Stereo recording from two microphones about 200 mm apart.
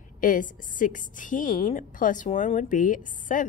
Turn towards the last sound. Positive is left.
turn(degrees=40)  # may be behind; listen again after turning